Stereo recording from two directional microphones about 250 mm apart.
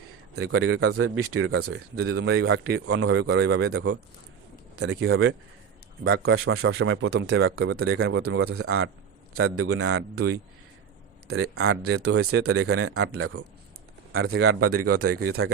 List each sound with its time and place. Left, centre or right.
0.3 s speech: right
2.0 s speech: right
4.8 s a man's voice: right
11.3 s speech: right
14.2 s a man's voice: right
14.4 s speech: right